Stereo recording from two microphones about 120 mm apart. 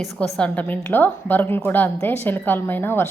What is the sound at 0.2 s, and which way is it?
A woman's voice, 10° left (ahead or behind).